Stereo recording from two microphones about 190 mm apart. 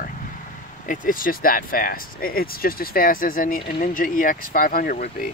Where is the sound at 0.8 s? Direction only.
45° left (ahead or behind).